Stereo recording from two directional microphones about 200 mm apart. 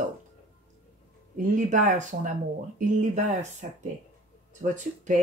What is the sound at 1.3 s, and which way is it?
Speech, 40° right (ahead or behind).